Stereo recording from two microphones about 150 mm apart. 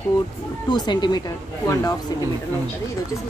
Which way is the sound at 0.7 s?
30° left (ahead or behind).